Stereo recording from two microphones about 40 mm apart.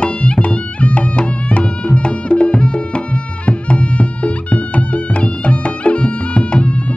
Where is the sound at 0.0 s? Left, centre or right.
Left.